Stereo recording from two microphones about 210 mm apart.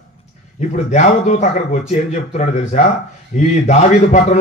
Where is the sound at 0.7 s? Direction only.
35° left (ahead or behind).